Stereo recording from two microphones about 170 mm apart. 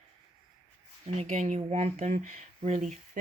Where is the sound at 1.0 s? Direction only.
35° right (ahead or behind).